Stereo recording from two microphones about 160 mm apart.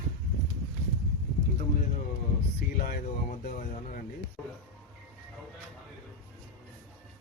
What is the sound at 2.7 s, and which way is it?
Speech, 65° left (ahead or behind).